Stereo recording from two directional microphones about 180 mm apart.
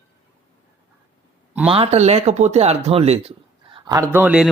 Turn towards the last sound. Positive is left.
turn(degrees=-5)  # may be behind; listen again after turning